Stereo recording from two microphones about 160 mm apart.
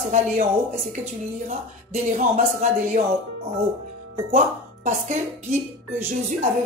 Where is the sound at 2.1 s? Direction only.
50° right (ahead or behind).